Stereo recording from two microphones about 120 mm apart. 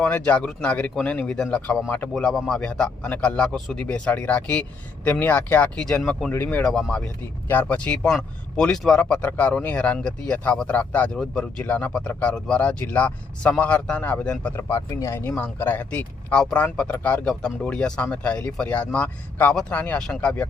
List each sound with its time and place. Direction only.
0.0 s speech: 10° left (ahead or behind)
6.3 s speech: 20° left (ahead or behind)
6.6 s speech: 5° left (ahead or behind)
14.5 s speech: 25° left (ahead or behind); by 20.5 s 10° left (ahead or behind)